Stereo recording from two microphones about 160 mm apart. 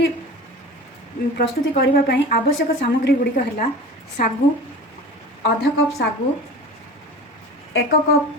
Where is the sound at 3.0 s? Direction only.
70° left (ahead or behind).